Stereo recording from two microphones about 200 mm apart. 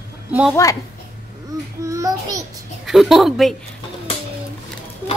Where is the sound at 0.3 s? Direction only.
5° right (ahead or behind).